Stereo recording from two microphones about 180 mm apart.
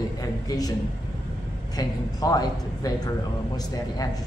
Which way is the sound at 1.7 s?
20° left (ahead or behind).